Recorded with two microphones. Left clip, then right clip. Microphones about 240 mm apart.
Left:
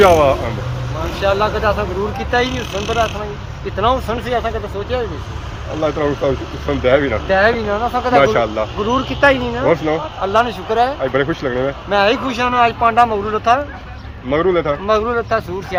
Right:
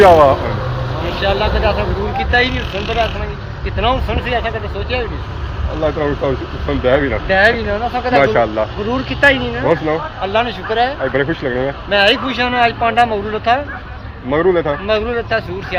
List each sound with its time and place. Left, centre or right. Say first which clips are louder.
0.0 s speech: right 3 dB; centre
1.2 s speech: left 1 dB; left
5.8 s speech: even; centre
7.3 s speech: right 2 dB; left
8.1 s speech: right 1 dB; centre
8.9 s speech: even; left
9.6 s speech: even; centre
10.3 s speech: left 1 dB; left
11.0 s speech: even; centre
11.9 s speech: right 2 dB; left
14.8 s speech: left 1 dB; left